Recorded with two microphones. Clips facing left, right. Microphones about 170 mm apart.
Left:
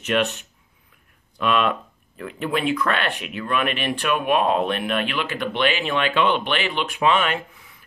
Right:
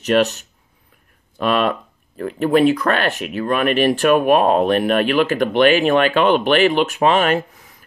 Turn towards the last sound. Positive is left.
turn(degrees=-40)  # may be behind; listen again after turning